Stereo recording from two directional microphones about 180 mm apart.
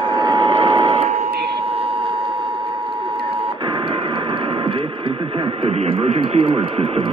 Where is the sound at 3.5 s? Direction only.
30° right (ahead or behind).